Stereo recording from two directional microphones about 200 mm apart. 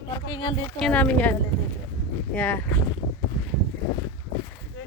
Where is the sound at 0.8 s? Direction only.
5° left (ahead or behind).